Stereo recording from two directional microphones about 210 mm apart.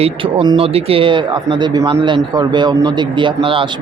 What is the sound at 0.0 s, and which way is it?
Speech, 25° right (ahead or behind).